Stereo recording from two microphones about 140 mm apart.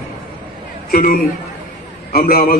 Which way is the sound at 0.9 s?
90° left.